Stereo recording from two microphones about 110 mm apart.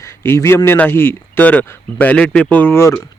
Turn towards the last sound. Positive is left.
turn(degrees=25)  # may be behind; listen again after turning